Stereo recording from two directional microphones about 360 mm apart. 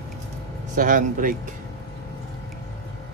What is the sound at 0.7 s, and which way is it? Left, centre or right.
Speech, right.